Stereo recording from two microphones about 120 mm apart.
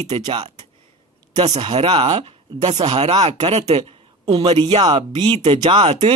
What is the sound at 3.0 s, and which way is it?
Speech, 35° right (ahead or behind).